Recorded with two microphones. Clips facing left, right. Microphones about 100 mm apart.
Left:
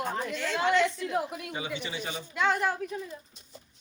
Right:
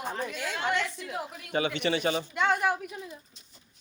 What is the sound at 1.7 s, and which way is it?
Speech, 70° right (ahead or behind).